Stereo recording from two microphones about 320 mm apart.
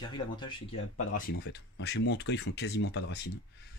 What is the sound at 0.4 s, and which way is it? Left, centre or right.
Speech, centre.